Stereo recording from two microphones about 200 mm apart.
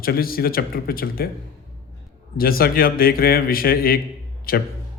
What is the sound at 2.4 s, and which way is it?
A man's voice, 50° left (ahead or behind).